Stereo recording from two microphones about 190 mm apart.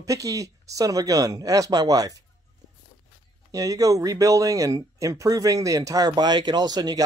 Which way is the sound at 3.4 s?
20° right (ahead or behind).